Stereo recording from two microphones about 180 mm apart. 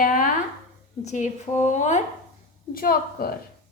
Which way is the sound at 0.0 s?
50° left (ahead or behind).